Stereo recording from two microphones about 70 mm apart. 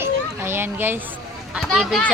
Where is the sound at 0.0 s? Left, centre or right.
Right.